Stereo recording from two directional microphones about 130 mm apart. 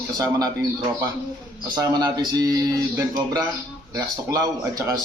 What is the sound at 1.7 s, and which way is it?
A man's voice, 30° right (ahead or behind).